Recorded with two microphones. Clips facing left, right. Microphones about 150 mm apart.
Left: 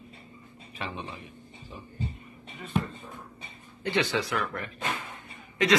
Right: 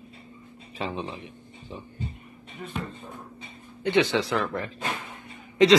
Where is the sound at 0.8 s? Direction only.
30° right (ahead or behind).